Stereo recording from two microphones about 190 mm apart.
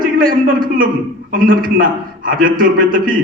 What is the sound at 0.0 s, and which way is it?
A man's voice, 50° right (ahead or behind).